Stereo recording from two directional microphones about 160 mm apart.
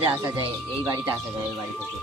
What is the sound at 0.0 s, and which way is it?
Speech, 25° right (ahead or behind).